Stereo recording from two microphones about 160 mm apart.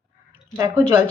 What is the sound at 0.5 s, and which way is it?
Speech, 15° right (ahead or behind).